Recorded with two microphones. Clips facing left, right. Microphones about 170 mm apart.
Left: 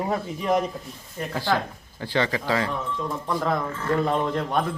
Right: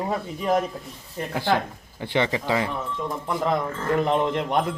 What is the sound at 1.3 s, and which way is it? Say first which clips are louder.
A man's voice: right 2 dB; 20° right (ahead or behind).